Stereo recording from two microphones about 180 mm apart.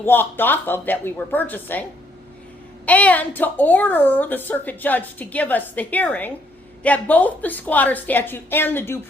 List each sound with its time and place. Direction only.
0.0 s a woman's voice: 10° left (ahead or behind)